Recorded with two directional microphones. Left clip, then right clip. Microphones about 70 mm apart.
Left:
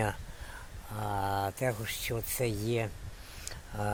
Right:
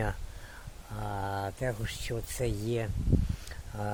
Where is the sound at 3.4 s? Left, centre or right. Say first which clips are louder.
Left 2 dB; centre.